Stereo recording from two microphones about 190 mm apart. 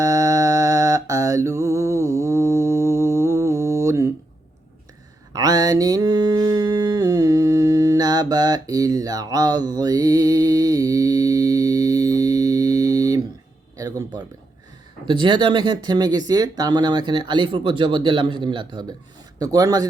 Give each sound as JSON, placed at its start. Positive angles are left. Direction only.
{"t": 0.0, "sound": "mantra", "side_deg": -15}
{"t": 5.3, "sound": "mantra", "side_deg": -20}
{"t": 13.7, "sound": "speech", "side_deg": -20}